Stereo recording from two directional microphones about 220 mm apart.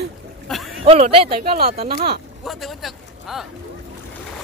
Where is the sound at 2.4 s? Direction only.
Centre (ahead or behind).